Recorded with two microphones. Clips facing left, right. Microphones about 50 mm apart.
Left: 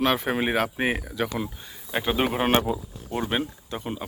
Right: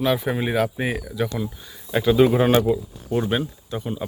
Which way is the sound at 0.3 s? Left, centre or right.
Left.